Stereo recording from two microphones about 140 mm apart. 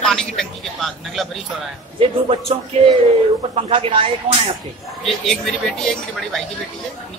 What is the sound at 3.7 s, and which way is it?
Speech, 40° right (ahead or behind).